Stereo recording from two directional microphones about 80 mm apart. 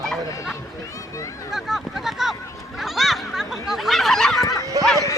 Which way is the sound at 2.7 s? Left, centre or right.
Centre.